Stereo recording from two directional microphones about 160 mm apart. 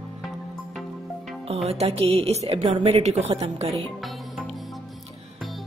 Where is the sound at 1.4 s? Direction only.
40° right (ahead or behind).